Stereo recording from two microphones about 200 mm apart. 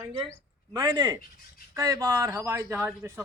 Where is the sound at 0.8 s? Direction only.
20° right (ahead or behind).